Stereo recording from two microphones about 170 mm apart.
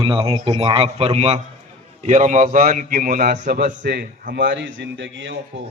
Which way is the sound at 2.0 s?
50° right (ahead or behind).